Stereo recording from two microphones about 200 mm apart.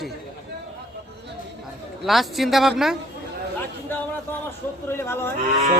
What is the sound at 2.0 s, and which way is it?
Speech, centre (ahead or behind).